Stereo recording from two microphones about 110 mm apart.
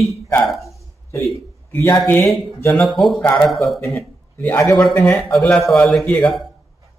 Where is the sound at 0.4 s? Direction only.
Centre (ahead or behind).